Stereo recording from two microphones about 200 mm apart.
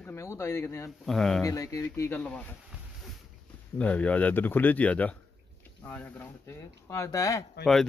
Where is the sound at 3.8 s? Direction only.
5° left (ahead or behind).